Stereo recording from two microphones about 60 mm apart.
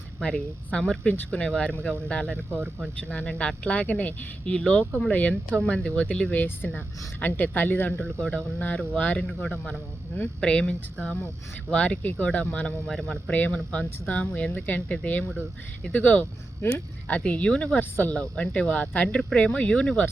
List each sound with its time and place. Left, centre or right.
0.2 s speech: centre; by 8.0 s left
8.0 s speech: centre
12.9 s speech: centre
13.3 s speech: left
17.7 s speech: left
18.1 s speech: left